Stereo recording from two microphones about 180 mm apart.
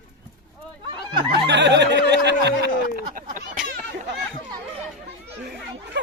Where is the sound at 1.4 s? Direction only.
75° right (ahead or behind).